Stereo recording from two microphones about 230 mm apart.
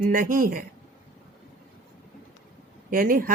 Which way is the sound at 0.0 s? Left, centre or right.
Right.